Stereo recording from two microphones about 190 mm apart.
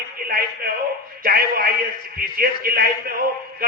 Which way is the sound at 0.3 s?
50° right (ahead or behind).